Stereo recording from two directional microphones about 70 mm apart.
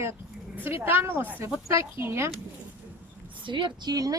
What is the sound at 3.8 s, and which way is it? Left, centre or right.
Speech, right.